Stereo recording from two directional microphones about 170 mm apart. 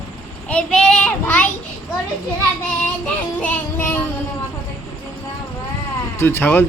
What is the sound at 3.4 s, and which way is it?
Child singing, 10° left (ahead or behind).